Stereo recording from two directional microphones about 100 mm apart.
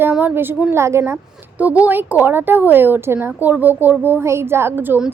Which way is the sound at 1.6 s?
15° right (ahead or behind).